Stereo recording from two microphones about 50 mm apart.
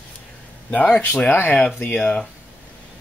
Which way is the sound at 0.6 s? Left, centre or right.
Left.